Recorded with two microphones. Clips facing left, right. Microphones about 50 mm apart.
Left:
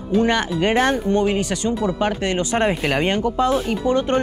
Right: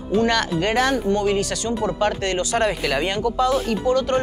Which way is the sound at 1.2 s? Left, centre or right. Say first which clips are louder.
Left 1 dB; centre.